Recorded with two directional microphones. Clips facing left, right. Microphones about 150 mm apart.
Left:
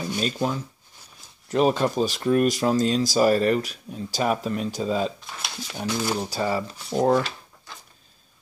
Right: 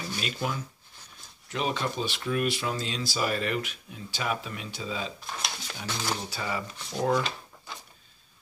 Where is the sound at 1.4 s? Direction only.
40° left (ahead or behind).